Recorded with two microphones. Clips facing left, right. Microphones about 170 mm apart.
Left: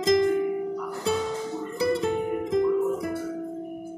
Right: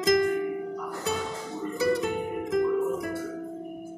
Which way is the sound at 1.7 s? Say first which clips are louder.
Left 1 dB; 25° left (ahead or behind).